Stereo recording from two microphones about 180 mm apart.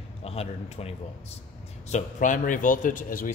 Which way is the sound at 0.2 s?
35° left (ahead or behind).